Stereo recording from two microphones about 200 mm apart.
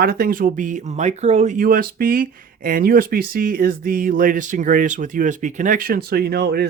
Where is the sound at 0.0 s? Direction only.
50° right (ahead or behind).